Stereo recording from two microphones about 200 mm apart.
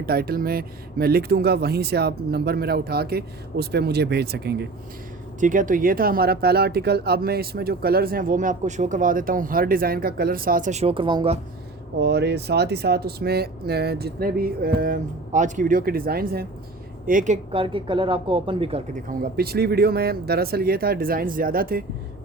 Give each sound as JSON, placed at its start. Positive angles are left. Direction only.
{"t": 0.0, "sound": "speech", "side_deg": -50}
{"t": 5.4, "sound": "speech", "side_deg": -40}
{"t": 11.9, "sound": "speech", "side_deg": -55}
{"t": 18.9, "sound": "speech", "side_deg": -45}